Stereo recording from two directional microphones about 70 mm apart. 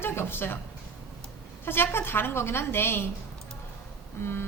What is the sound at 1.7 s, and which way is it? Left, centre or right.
A woman's voice, left.